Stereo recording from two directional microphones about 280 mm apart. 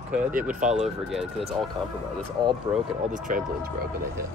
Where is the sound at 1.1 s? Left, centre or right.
Centre.